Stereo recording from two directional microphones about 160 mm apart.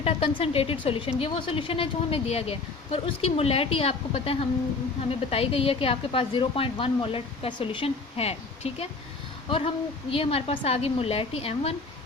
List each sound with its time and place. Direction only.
0.0 s a woman's voice: 35° left (ahead or behind)